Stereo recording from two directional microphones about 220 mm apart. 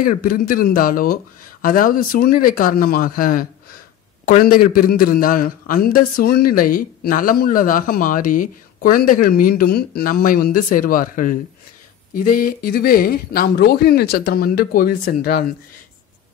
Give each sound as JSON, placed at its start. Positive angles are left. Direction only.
{"t": 0.0, "sound": "a man's voice", "side_deg": 40}